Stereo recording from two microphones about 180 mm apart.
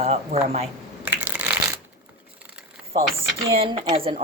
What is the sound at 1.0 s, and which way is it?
Crushing, 10° right (ahead or behind).